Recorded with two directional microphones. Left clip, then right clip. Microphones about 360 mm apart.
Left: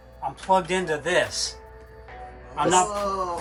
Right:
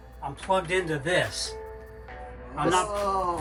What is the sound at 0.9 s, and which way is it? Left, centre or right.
Speech, left.